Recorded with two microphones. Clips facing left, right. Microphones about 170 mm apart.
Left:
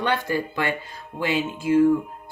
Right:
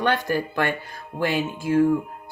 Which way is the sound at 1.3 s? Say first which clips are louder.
Left 2 dB; 45° right (ahead or behind).